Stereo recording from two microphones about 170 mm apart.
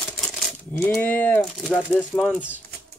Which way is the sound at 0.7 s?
10° left (ahead or behind).